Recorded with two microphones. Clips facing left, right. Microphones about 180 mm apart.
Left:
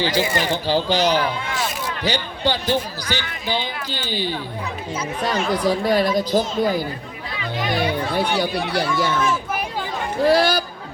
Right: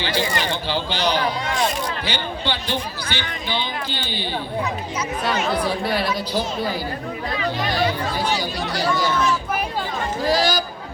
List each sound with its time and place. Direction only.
0.0 s speech: 40° left (ahead or behind)
8.1 s speech: 60° left (ahead or behind)
10.2 s speech: 60° left (ahead or behind)